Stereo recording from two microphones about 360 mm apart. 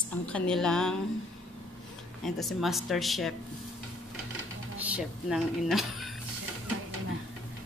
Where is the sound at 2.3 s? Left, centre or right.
Centre.